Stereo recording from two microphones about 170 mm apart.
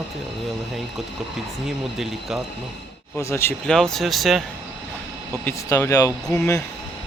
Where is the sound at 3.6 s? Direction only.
5° left (ahead or behind).